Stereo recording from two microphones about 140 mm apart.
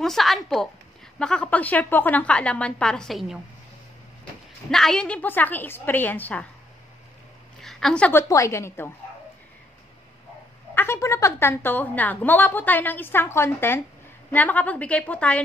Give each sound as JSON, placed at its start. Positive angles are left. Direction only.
{"t": 0.0, "sound": "a woman's voice", "side_deg": 0}
{"t": 4.6, "sound": "a woman's voice", "side_deg": 5}
{"t": 7.6, "sound": "a woman's voice", "side_deg": 5}
{"t": 10.7, "sound": "a woman's voice", "side_deg": 15}